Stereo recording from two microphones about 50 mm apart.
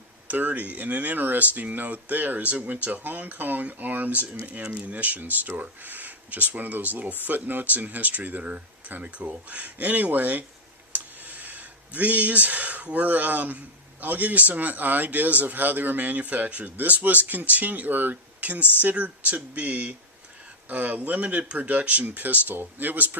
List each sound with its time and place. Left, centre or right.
0.3 s a man's voice: right